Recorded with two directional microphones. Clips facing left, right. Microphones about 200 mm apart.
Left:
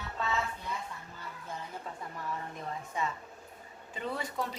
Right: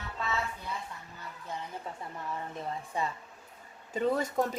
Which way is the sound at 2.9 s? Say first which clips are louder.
Right 1 dB; 35° right (ahead or behind).